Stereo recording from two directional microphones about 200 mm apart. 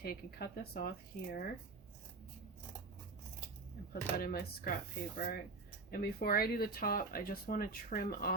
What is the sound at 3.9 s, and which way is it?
Speech, 50° left (ahead or behind).